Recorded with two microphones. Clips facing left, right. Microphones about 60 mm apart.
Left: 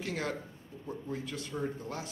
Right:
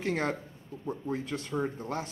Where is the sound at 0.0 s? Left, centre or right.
Right.